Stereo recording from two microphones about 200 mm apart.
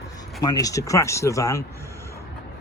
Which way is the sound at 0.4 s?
15° left (ahead or behind).